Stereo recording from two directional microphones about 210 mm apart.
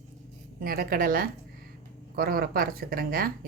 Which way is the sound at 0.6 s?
45° right (ahead or behind).